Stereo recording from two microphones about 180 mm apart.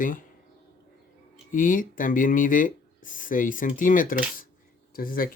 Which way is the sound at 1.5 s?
50° left (ahead or behind).